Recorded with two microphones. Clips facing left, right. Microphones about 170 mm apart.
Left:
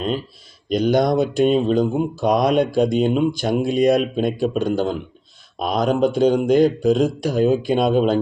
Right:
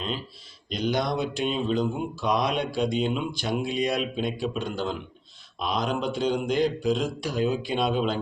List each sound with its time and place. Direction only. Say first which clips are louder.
0.7 s speech: left 9 dB; 45° left (ahead or behind)